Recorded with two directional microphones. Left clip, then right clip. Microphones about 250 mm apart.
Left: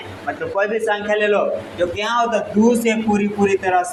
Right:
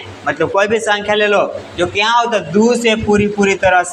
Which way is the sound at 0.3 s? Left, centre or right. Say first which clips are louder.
Right 7 dB; right.